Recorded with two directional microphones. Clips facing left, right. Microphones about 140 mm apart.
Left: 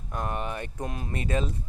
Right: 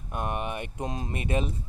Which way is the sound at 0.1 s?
20° right (ahead or behind).